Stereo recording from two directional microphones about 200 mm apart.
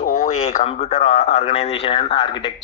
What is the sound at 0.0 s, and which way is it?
Speech, 35° left (ahead or behind).